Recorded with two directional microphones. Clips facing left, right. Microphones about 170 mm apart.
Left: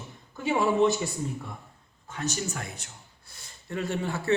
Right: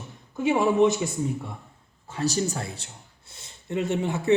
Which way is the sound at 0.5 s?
20° right (ahead or behind).